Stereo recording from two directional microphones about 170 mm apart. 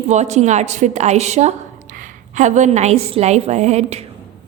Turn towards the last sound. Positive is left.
turn(degrees=-40)  # may be behind; listen again after turning